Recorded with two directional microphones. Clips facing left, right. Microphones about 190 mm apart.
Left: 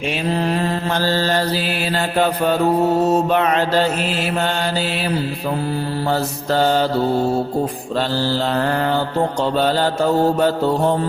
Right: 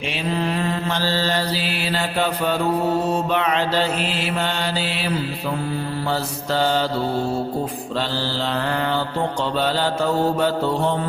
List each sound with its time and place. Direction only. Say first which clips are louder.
0.4 s mantra: left 3 dB; 40° left (ahead or behind)
6.1 s mantra: left 4 dB; 45° left (ahead or behind)
7.9 s mantra: left 5 dB; 45° left (ahead or behind)